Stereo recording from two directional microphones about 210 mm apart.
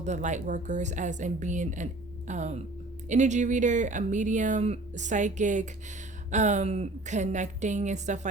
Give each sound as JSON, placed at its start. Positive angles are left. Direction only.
{"t": 0.0, "sound": "speech", "side_deg": -35}